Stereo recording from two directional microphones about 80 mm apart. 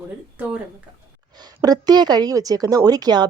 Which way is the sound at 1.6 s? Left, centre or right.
Right.